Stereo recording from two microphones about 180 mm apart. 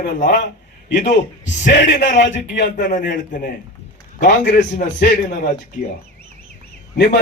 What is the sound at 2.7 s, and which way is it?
Speech, 45° left (ahead or behind).